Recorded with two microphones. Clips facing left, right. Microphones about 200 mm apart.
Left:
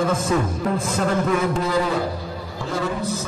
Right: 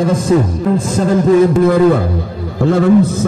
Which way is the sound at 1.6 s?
55° right (ahead or behind).